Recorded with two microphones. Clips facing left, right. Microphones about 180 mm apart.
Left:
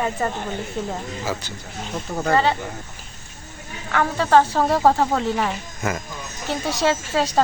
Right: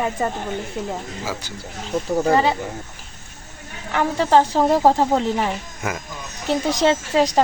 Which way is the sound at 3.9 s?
25° right (ahead or behind).